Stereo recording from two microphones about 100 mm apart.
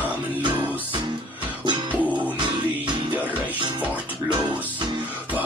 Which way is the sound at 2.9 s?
50° right (ahead or behind).